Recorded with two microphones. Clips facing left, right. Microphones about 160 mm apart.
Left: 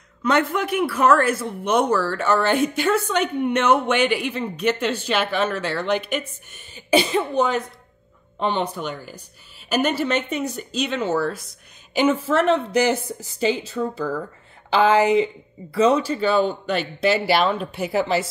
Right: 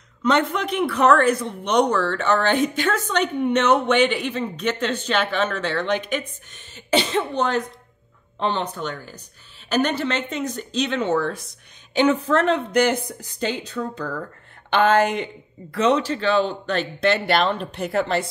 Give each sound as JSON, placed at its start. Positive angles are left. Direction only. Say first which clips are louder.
{"t": 0.2, "sound": "speech", "louder": "even", "side_deg": 10}